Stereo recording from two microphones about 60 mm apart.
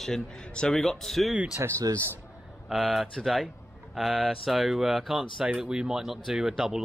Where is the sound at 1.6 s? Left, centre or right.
Right.